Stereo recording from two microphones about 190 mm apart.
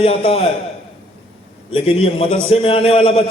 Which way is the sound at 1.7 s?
30° left (ahead or behind).